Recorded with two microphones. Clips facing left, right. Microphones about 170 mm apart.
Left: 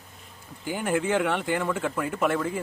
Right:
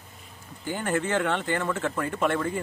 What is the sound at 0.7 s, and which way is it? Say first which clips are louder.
Speech: left 2 dB; 10° left (ahead or behind).